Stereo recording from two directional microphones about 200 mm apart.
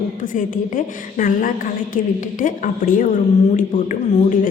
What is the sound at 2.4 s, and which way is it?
Speech, 40° left (ahead or behind).